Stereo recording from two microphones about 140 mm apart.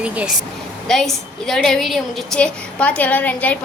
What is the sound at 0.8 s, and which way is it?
A woman's voice, 5° left (ahead or behind).